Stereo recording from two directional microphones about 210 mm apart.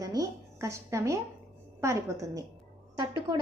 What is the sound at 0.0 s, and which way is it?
A woman's voice, 15° right (ahead or behind).